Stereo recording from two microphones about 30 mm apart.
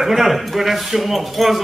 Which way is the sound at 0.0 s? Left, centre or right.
Centre.